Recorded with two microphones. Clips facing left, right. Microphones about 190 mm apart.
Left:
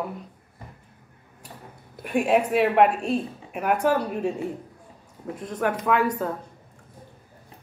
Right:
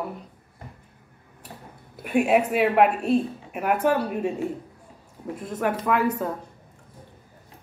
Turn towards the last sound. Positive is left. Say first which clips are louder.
# even
turn(degrees=-5)  # may be behind; listen again after turning